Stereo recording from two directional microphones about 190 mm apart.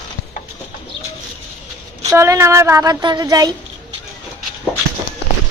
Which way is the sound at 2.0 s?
15° right (ahead or behind).